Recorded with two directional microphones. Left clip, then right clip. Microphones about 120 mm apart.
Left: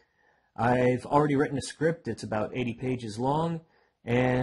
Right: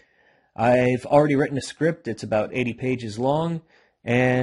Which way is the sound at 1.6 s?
20° right (ahead or behind).